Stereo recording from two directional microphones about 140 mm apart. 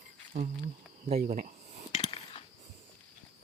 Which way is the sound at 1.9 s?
50° left (ahead or behind).